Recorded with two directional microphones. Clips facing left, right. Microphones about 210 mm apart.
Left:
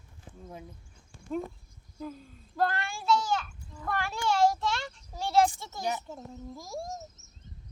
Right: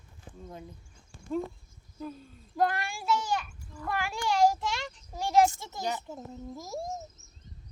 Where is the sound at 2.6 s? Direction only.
15° right (ahead or behind).